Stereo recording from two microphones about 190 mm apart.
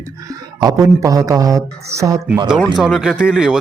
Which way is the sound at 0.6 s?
20° right (ahead or behind).